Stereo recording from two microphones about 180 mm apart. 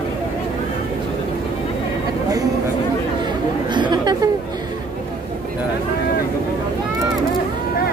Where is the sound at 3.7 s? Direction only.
25° right (ahead or behind).